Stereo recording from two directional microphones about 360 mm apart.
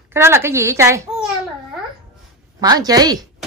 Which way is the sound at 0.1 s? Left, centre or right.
Centre.